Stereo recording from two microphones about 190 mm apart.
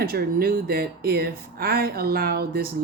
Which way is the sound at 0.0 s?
50° right (ahead or behind).